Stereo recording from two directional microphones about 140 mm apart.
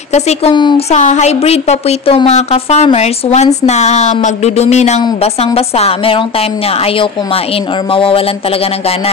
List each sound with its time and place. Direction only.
0.1 s a woman's voice: 50° left (ahead or behind)